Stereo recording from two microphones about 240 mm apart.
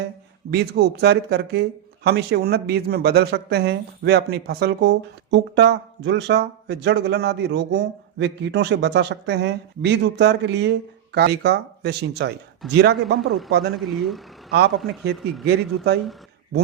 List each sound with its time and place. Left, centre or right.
0.5 s speech: right
13.1 s speech: centre
13.5 s speech: right
13.7 s speech: centre
15.0 s speech: right